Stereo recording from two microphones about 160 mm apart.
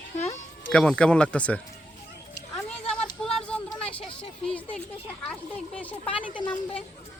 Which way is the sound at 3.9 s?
35° left (ahead or behind).